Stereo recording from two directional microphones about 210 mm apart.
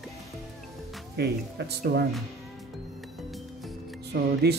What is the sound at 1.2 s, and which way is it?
Music, 50° right (ahead or behind).